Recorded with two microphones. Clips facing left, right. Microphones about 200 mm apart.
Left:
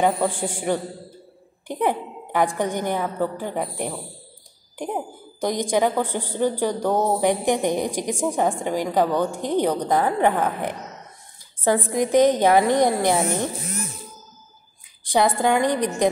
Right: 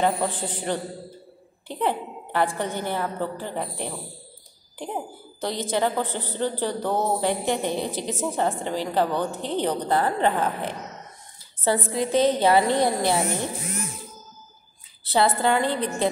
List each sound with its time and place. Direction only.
0.0 s a woman's voice: 10° left (ahead or behind)
15.0 s a woman's voice: 15° left (ahead or behind)